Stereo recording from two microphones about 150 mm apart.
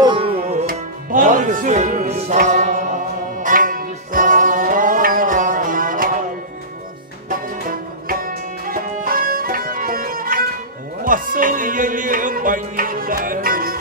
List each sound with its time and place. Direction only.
0.0 s tabla: 35° right (ahead or behind)
0.7 s music: 65° right (ahead or behind); by 2.3 s 45° right (ahead or behind)
2.3 s mantra: 50° right (ahead or behind)
3.4 s music: 65° right (ahead or behind)
8.1 s music: 70° right (ahead or behind)